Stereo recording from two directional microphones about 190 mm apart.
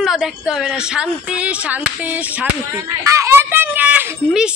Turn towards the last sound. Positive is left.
turn(degrees=-5)  # may be behind; listen again after turning